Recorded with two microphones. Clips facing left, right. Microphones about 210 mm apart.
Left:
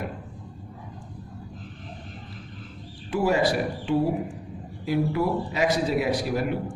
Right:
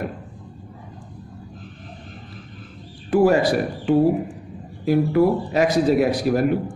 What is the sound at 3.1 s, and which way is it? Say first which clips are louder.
A man's voice: right 6 dB; 50° right (ahead or behind).